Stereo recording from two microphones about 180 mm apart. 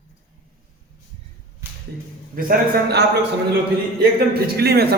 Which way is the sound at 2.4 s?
55° right (ahead or behind).